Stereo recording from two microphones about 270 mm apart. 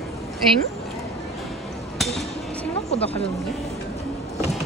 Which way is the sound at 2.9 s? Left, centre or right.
Left.